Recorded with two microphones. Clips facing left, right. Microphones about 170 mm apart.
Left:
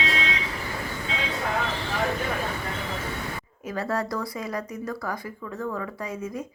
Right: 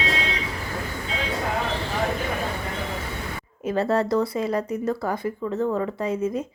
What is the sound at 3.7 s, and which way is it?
Speech, 25° right (ahead or behind).